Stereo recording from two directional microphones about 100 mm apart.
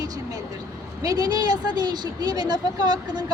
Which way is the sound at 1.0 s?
40° right (ahead or behind).